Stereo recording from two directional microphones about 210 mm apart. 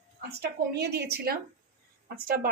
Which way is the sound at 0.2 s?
50° right (ahead or behind).